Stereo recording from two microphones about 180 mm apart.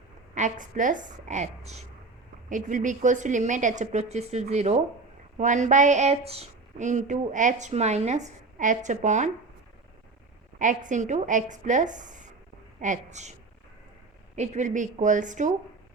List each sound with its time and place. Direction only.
0.3 s a woman's voice: 45° right (ahead or behind)
10.6 s a woman's voice: 45° right (ahead or behind)
14.3 s a woman's voice: 40° right (ahead or behind)